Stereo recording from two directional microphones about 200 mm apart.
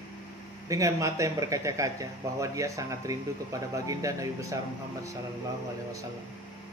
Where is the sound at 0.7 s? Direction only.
15° right (ahead or behind).